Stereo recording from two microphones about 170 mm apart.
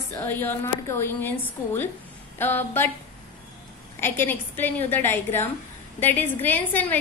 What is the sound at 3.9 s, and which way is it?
A woman's voice, 15° left (ahead or behind).